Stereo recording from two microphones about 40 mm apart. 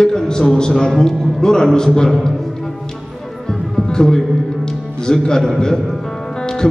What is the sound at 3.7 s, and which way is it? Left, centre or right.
Music, centre.